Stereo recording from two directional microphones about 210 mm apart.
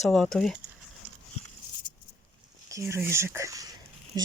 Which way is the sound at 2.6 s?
15° right (ahead or behind).